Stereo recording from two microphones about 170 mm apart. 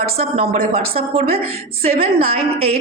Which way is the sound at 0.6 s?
60° right (ahead or behind).